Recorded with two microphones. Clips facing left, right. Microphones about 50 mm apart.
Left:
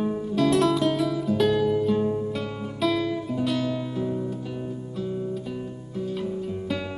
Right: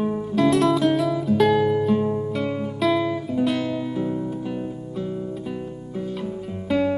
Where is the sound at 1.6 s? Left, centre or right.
Centre.